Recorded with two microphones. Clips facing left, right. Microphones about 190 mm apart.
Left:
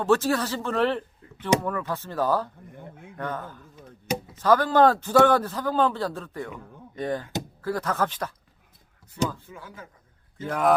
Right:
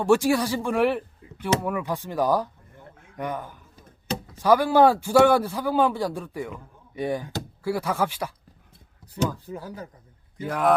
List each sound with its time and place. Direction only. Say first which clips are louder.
0.0 s a man's voice: right 2 dB; 15° right (ahead or behind)
9.2 s speech: right 2 dB; 30° right (ahead or behind)
10.3 s speech: right 1 dB; 10° right (ahead or behind)